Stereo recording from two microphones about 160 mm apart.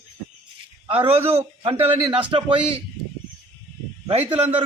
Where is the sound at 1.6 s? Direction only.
35° right (ahead or behind).